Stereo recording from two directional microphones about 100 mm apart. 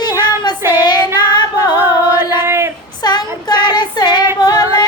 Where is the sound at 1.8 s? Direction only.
25° right (ahead or behind).